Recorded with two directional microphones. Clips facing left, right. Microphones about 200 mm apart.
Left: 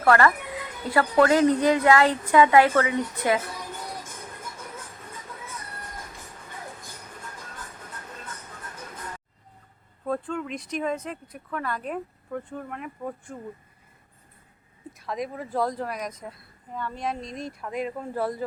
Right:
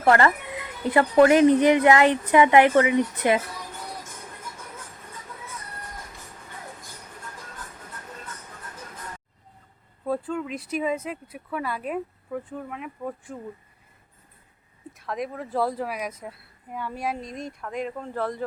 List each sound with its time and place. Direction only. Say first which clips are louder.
0.0 s speech: right 1 dB; 20° right (ahead or behind)
10.1 s speech: right 1 dB; 5° right (ahead or behind)
14.9 s speech: right 1 dB; centre (ahead or behind)